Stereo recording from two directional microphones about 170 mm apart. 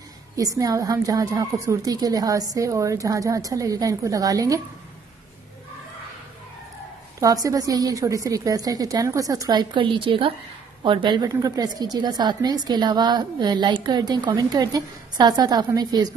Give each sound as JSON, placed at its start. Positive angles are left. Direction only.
{"t": 0.4, "sound": "a woman's voice", "side_deg": -20}
{"t": 7.2, "sound": "a woman's voice", "side_deg": -20}